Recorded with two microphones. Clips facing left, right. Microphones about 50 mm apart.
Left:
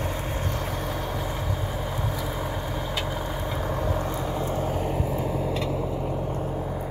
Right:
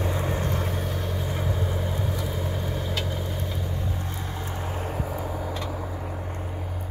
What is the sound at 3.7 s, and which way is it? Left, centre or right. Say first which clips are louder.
Vehicle: left 6 dB; left.